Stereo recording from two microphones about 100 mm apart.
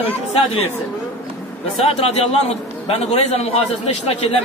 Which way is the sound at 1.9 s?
85° left.